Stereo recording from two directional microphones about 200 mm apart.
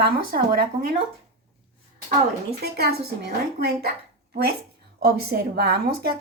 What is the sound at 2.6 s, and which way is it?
Speech, 50° right (ahead or behind).